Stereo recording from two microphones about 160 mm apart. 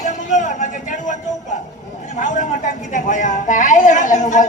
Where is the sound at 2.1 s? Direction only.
55° left (ahead or behind).